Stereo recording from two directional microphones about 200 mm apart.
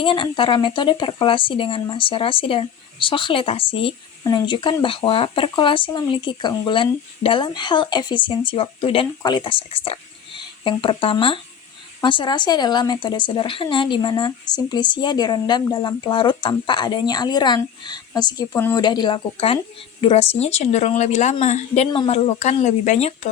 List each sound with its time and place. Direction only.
0.0 s speech: 25° left (ahead or behind)